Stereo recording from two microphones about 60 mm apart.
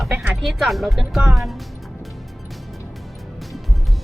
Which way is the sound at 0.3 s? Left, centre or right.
Centre.